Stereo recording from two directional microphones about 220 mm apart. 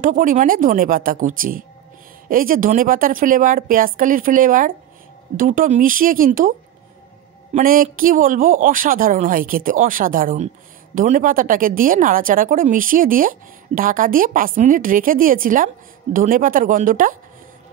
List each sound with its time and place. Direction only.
0.0 s a woman's voice: 35° right (ahead or behind)
7.5 s a woman's voice: 40° right (ahead or behind)